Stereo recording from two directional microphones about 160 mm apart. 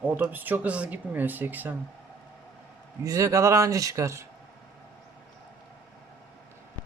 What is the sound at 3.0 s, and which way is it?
Speech, 20° right (ahead or behind).